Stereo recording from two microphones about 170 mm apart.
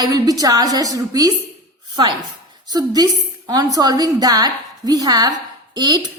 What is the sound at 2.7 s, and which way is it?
A woman's voice, 25° right (ahead or behind).